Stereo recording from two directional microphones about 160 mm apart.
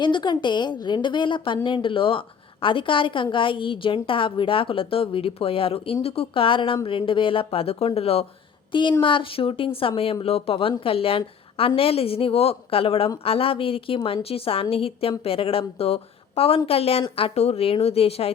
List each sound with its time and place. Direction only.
0.0 s a woman's voice: 30° left (ahead or behind)